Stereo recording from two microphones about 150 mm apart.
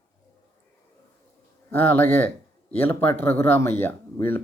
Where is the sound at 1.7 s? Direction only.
15° left (ahead or behind).